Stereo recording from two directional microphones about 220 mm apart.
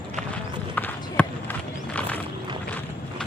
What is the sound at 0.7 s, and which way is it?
Clip-clop, 5° left (ahead or behind).